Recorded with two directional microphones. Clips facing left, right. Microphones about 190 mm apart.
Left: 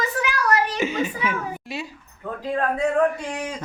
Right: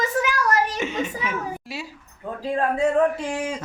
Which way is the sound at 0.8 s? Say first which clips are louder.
Left 2 dB; centre (ahead or behind).